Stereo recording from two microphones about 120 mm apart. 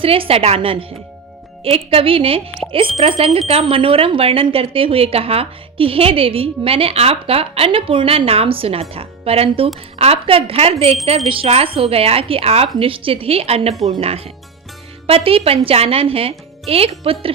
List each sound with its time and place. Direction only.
0.0 s speech: 50° right (ahead or behind)